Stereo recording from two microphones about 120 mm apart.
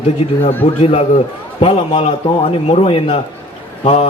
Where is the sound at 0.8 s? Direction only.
55° left (ahead or behind).